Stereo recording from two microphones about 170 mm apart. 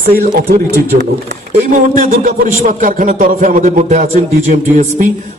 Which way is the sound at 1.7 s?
50° right (ahead or behind).